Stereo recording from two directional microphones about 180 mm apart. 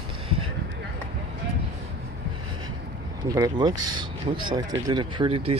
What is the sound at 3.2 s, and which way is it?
Speech, 20° right (ahead or behind).